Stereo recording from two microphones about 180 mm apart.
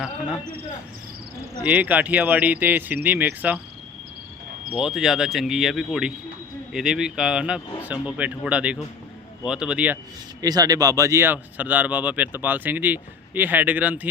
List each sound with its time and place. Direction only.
1.6 s speech: 10° right (ahead or behind)
4.8 s speech: centre (ahead or behind)
10.4 s speech: 20° right (ahead or behind)